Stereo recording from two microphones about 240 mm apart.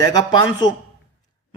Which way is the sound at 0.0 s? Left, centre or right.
Centre.